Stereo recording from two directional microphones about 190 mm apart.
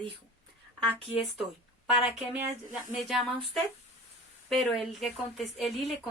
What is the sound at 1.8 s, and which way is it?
Speech, 5° right (ahead or behind).